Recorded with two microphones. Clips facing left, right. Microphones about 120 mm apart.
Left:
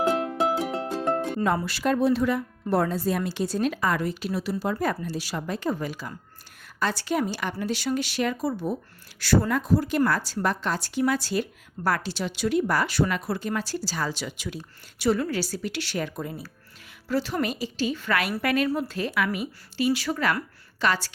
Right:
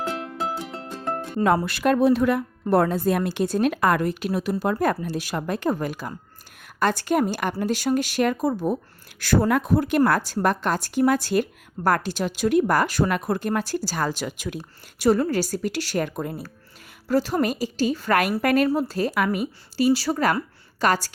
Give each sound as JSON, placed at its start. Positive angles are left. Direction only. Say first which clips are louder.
{"t": 0.6, "sound": "music", "louder": "left 5 dB", "side_deg": 60}
{"t": 1.6, "sound": "a woman's voice", "louder": "right 4 dB", "side_deg": -60}